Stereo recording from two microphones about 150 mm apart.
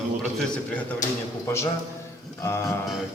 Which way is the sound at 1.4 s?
20° left (ahead or behind).